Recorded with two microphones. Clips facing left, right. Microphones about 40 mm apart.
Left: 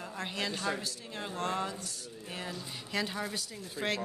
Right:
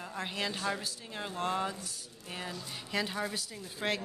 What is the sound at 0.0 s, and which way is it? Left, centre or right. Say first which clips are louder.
A woman's voice: even; centre.